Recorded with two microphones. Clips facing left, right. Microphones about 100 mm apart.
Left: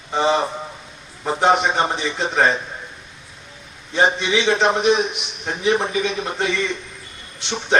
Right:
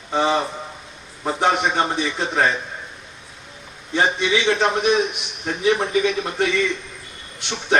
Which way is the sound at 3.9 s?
20° left (ahead or behind).